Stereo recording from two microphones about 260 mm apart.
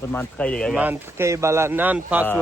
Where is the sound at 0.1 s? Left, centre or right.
Centre.